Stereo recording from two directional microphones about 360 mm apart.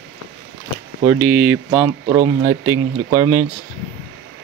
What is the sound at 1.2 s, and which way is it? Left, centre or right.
Speech, right.